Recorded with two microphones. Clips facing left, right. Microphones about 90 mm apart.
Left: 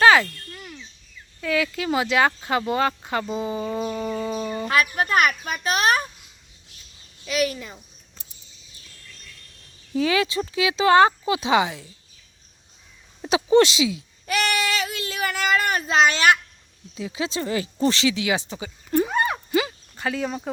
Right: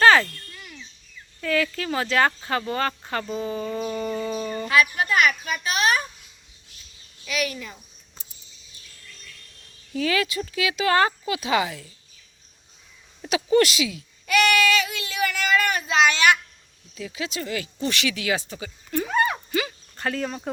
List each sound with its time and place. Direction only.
0.0 s cricket: 10° left (ahead or behind)
1.4 s speech: 10° left (ahead or behind)
4.7 s a woman's voice: 45° left (ahead or behind)
7.3 s speech: 30° left (ahead or behind)
9.9 s speech: 20° left (ahead or behind)
13.2 s speech: 25° left (ahead or behind)
16.9 s speech: 20° left (ahead or behind)
20.0 s speech: 5° left (ahead or behind)